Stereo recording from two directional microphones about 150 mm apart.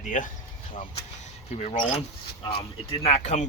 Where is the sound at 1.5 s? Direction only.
50° left (ahead or behind).